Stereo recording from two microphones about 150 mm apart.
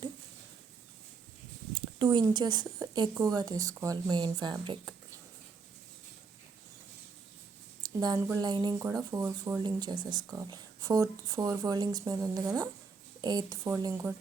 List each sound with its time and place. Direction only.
1.7 s speech: 30° right (ahead or behind)
7.8 s a sound: 25° right (ahead or behind)
8.4 s speech: 30° right (ahead or behind)